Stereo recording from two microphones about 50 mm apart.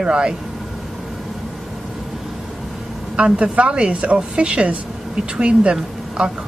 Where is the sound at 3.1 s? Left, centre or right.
Right.